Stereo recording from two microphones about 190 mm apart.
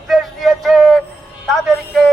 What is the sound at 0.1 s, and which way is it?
Music, centre (ahead or behind).